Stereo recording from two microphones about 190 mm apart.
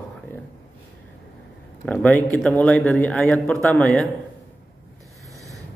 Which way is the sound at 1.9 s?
10° left (ahead or behind).